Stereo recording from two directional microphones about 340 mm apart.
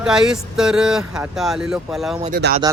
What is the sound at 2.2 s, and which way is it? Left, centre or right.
Speech, right.